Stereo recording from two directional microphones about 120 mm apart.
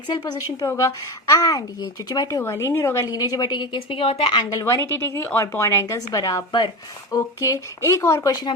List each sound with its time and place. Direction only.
0.7 s a woman's voice: 25° left (ahead or behind)